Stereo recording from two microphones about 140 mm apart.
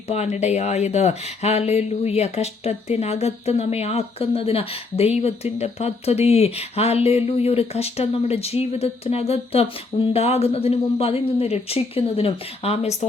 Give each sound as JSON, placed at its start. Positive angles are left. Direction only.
{"t": 0.1, "sound": "speech", "side_deg": 55}